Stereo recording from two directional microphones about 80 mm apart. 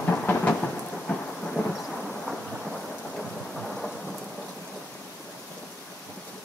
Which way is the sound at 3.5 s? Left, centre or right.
Centre.